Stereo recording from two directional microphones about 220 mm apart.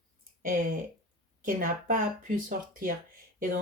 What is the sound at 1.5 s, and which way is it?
Speech, 35° right (ahead or behind).